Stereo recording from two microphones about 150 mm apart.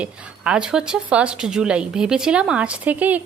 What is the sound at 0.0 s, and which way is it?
A woman's voice, 5° right (ahead or behind).